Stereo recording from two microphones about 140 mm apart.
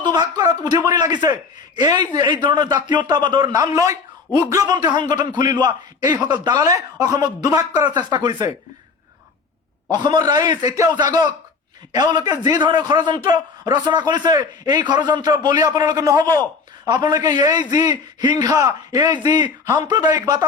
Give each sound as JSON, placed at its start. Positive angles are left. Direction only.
{"t": 0.0, "sound": "a man's voice", "side_deg": -30}
{"t": 9.9, "sound": "a man's voice", "side_deg": -30}